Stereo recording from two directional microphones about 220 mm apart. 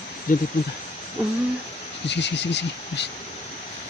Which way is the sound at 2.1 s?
50° left (ahead or behind).